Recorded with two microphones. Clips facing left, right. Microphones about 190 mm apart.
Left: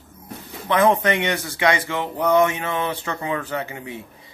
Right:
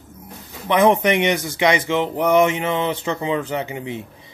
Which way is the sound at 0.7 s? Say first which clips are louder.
Right 2 dB; 20° right (ahead or behind).